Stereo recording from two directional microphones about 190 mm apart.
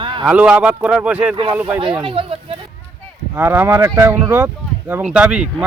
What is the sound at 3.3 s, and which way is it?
Speech, 10° right (ahead or behind).